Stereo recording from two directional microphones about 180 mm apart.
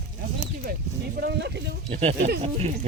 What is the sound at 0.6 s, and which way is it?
Speech, 55° right (ahead or behind).